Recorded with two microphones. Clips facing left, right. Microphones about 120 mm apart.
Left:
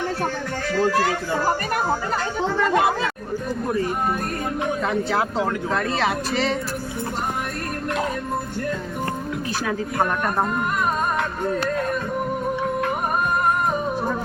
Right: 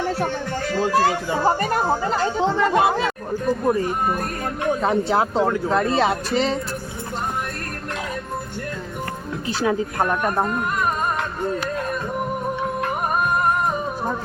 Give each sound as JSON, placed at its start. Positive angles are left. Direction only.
{"t": 0.7, "sound": "speech", "side_deg": -20}
{"t": 4.8, "sound": "speech", "side_deg": -35}